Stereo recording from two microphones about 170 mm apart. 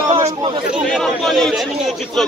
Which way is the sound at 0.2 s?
25° right (ahead or behind).